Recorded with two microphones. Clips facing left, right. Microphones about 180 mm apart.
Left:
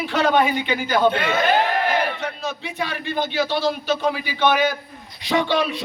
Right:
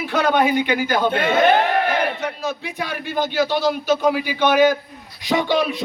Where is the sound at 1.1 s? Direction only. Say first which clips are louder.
Right 3 dB; 50° right (ahead or behind).